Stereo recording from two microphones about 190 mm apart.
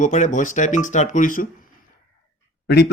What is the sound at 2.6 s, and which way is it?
Speech, 60° left (ahead or behind).